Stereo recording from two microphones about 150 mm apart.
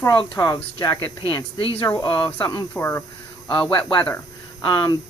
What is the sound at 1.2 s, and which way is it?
Speech, 35° left (ahead or behind).